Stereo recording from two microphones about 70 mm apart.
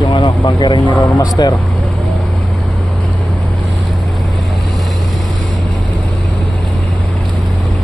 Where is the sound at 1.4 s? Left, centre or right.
Left.